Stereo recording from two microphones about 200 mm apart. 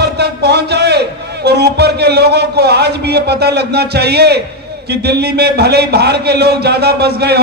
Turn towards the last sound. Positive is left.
turn(degrees=-55)  # may be behind; listen again after turning